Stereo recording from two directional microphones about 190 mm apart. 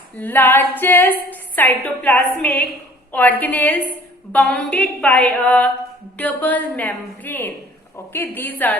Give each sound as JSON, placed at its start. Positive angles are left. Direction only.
{"t": 0.2, "sound": "a woman's voice", "side_deg": 10}